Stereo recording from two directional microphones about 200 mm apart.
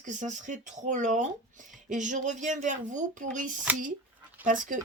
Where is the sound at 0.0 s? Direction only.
40° right (ahead or behind).